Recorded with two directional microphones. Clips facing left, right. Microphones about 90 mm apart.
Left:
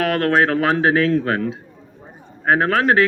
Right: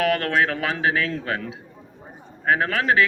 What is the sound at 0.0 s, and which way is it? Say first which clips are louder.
Speech: left 4 dB; 35° left (ahead or behind).